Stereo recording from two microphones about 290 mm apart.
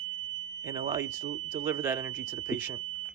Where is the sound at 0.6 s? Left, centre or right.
Centre.